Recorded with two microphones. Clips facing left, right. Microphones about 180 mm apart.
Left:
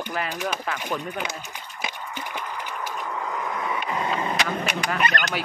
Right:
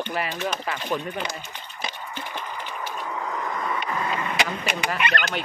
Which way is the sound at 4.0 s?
25° left (ahead or behind).